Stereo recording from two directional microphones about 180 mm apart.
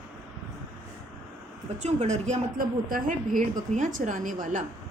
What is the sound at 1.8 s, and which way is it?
A woman's voice, 40° right (ahead or behind).